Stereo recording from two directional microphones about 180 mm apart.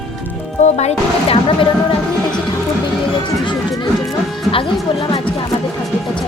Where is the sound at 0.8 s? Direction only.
35° left (ahead or behind).